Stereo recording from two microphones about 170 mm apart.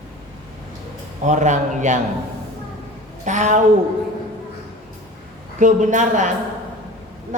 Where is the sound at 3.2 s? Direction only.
45° right (ahead or behind).